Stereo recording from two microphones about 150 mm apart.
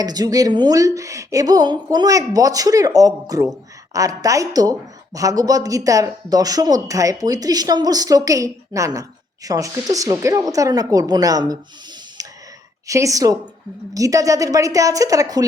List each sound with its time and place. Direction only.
0.0 s speech: 25° right (ahead or behind)
12.2 s sigh: 25° right (ahead or behind)
12.9 s speech: 20° right (ahead or behind)